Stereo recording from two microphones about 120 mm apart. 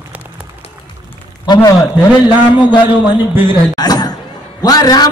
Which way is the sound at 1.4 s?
35° left (ahead or behind).